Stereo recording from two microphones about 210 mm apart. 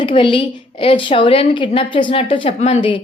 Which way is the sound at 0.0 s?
25° left (ahead or behind).